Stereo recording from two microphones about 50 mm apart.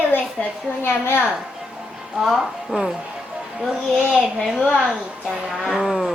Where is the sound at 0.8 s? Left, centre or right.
Left.